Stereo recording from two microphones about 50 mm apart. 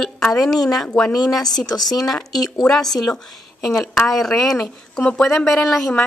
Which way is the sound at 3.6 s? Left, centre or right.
Centre.